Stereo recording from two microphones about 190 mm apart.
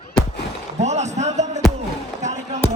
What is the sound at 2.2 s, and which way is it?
Basketball bounce, 35° right (ahead or behind).